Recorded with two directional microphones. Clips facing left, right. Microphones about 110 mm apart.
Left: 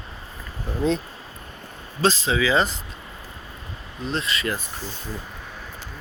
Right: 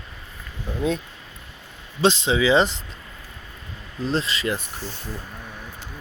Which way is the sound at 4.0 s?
30° right (ahead or behind).